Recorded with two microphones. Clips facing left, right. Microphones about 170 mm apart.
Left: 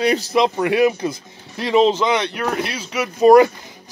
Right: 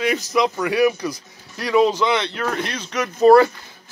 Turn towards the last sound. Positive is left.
turn(degrees=10)  # may be behind; listen again after turning